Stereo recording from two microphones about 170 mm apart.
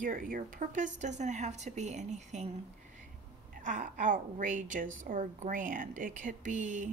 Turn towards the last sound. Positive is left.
turn(degrees=-45)  # may be behind; listen again after turning